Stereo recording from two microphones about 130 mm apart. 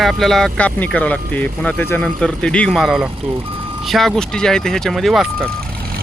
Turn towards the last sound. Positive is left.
turn(degrees=0)  # may be behind; listen again after turning